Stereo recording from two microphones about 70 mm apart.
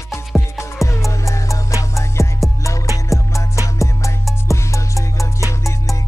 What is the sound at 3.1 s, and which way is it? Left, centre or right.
Music, centre.